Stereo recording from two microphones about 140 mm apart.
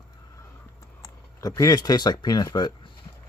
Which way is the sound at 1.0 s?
25° left (ahead or behind).